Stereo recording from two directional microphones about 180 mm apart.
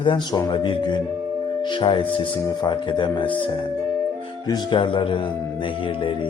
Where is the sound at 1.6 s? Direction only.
25° left (ahead or behind).